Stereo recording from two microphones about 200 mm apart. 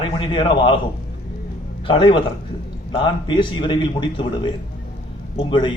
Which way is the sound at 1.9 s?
25° left (ahead or behind).